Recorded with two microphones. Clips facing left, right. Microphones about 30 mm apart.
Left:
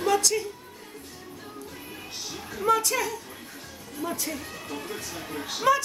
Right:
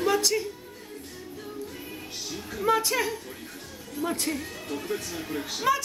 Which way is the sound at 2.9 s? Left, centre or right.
Centre.